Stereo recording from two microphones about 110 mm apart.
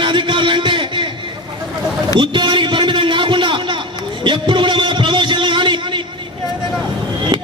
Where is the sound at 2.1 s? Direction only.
45° right (ahead or behind).